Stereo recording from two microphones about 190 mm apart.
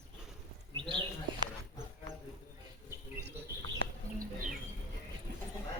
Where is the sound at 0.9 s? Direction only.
25° right (ahead or behind).